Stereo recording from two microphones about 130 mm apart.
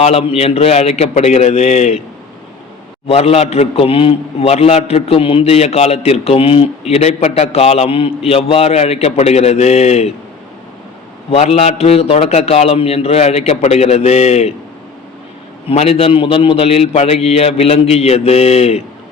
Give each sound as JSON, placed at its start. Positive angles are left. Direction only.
{"t": 0.0, "sound": "a man's voice", "side_deg": 50}
{"t": 3.1, "sound": "a man's voice", "side_deg": 50}
{"t": 11.3, "sound": "a man's voice", "side_deg": 55}
{"t": 15.7, "sound": "a man's voice", "side_deg": 50}